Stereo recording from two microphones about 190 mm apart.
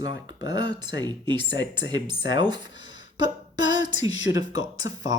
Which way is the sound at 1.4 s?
65° left (ahead or behind).